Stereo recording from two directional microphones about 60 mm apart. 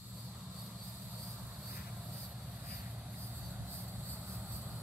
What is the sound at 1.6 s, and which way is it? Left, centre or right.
Vehicle, centre.